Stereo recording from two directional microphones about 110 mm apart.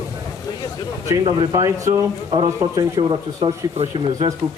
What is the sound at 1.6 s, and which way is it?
Speech, 30° right (ahead or behind).